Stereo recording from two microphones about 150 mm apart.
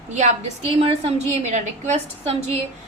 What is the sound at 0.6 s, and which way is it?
A woman's voice, 40° right (ahead or behind).